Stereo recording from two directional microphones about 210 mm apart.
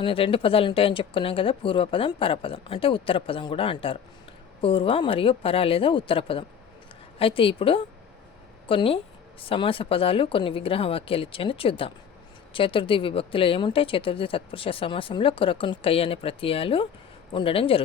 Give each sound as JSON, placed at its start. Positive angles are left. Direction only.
{"t": 0.0, "sound": "a woman's voice", "side_deg": 25}